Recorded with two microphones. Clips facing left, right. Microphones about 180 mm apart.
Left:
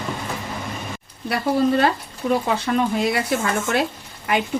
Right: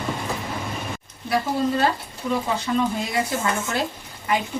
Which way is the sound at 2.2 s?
65° left (ahead or behind).